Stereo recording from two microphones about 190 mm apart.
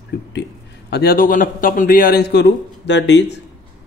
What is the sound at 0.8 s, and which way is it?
A man's voice, 55° left (ahead or behind).